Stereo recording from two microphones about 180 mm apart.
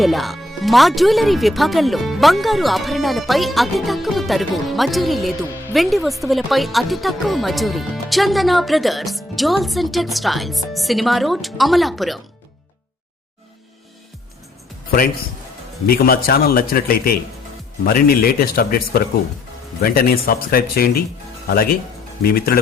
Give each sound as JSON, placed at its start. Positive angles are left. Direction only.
{"t": 0.0, "sound": "speech", "side_deg": 0}
{"t": 15.9, "sound": "a man's voice", "side_deg": 55}